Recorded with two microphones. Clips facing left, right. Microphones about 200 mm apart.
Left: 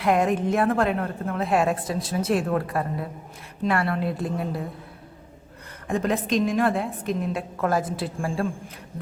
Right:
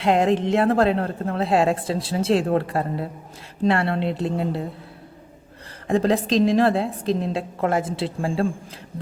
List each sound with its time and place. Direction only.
0.0 s a woman's voice: 25° right (ahead or behind)
5.9 s a woman's voice: 30° right (ahead or behind)